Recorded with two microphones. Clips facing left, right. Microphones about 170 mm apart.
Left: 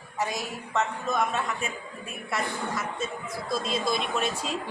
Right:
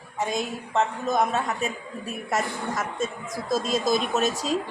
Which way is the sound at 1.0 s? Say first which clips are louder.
Right 4 dB; 40° right (ahead or behind).